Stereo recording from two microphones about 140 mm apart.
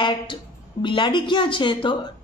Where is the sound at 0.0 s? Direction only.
35° left (ahead or behind).